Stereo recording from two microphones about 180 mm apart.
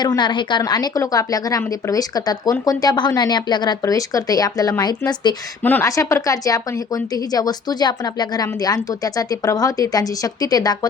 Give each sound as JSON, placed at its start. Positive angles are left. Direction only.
{"t": 0.0, "sound": "a woman's voice", "side_deg": 25}